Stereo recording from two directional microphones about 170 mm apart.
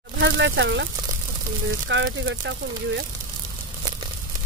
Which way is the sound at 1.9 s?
90° right.